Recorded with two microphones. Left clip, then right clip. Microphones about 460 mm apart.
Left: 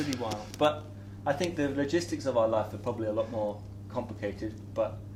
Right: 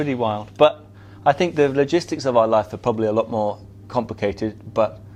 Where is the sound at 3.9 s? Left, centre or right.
Right.